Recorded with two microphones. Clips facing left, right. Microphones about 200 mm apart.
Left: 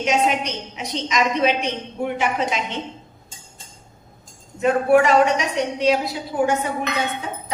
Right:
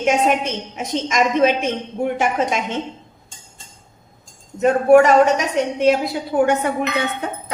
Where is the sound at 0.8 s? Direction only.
50° right (ahead or behind).